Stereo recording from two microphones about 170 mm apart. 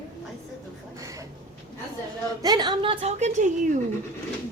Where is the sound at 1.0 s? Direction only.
20° right (ahead or behind).